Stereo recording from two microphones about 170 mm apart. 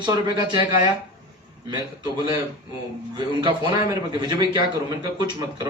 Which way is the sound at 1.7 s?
30° right (ahead or behind).